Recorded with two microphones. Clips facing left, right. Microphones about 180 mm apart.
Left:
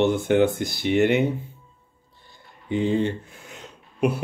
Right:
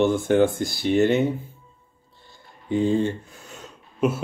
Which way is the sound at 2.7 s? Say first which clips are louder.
Right 1 dB; 20° left (ahead or behind).